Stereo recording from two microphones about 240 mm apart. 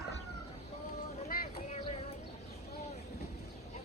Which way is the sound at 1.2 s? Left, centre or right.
Left.